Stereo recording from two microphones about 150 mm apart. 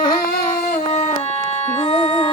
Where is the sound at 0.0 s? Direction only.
90° left.